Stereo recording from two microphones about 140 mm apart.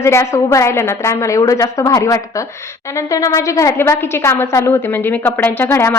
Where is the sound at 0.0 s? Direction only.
20° left (ahead or behind).